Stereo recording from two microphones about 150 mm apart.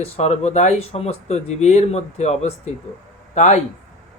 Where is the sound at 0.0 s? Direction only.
45° left (ahead or behind).